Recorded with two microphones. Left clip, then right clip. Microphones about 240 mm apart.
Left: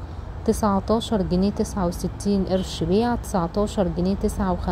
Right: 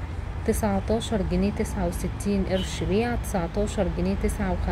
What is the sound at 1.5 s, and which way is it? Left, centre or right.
Speech, centre.